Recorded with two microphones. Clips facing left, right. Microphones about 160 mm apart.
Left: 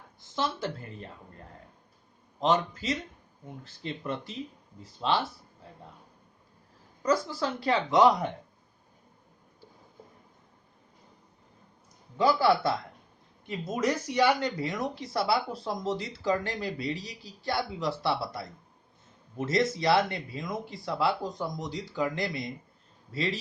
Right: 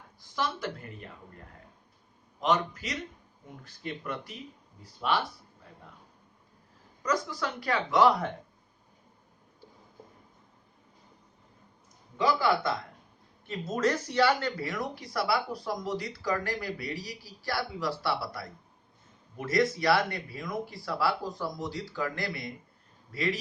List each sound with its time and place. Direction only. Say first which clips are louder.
0.2 s a woman's voice: left 1 dB; 25° left (ahead or behind)
2.4 s speech: left 2 dB; 30° left (ahead or behind)
7.0 s speech: left 3 dB; 30° left (ahead or behind)
12.1 s speech: left 3 dB; 30° left (ahead or behind)
13.5 s speech: even; 10° left (ahead or behind)